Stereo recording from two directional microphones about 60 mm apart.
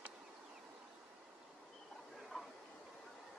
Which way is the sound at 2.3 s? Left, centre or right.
Centre.